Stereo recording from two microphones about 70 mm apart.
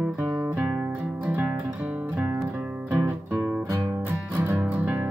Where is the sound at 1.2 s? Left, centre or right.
Right.